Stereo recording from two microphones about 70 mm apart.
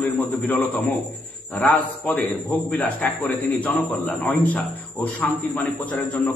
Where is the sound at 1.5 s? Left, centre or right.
Left.